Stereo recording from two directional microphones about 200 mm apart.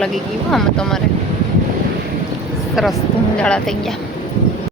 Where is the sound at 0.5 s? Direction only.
Centre (ahead or behind).